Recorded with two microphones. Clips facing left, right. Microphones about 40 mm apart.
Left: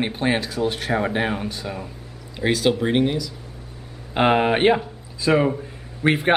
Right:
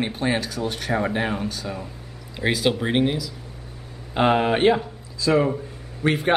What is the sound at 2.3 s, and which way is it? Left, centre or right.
Speech, centre.